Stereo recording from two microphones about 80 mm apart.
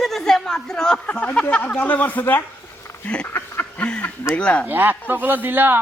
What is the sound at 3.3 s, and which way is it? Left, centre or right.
Duck, left.